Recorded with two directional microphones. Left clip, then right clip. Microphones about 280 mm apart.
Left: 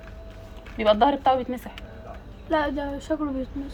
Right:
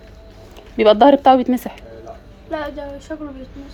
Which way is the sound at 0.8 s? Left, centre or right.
Centre.